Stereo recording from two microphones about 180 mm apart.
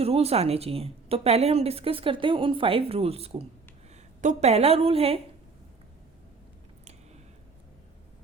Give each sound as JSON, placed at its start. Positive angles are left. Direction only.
{"t": 0.0, "sound": "a woman's voice", "side_deg": -35}